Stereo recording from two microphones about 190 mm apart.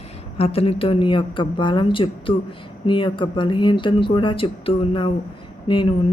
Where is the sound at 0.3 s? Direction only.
30° left (ahead or behind).